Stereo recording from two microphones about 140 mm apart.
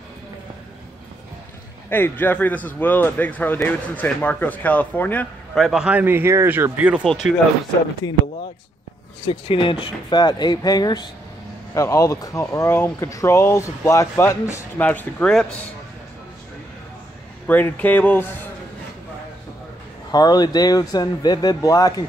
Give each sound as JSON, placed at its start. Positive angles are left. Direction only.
{"t": 1.9, "sound": "speech", "side_deg": 15}
{"t": 5.5, "sound": "speech", "side_deg": 0}
{"t": 8.0, "sound": "speech", "side_deg": 30}
{"t": 9.3, "sound": "speech", "side_deg": 40}
{"t": 17.5, "sound": "speech", "side_deg": 10}
{"t": 20.1, "sound": "speech", "side_deg": 30}